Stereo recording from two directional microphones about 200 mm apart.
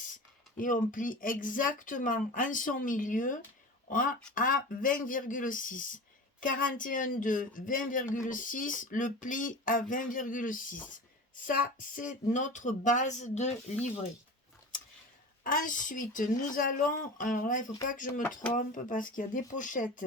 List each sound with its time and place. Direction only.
0.5 s speech: 40° left (ahead or behind)
11.4 s a sound: 45° left (ahead or behind)
12.3 s speech: 40° left (ahead or behind)
15.4 s speech: 40° left (ahead or behind)
18.2 s speech: 10° left (ahead or behind)
18.5 s speech: 40° left (ahead or behind)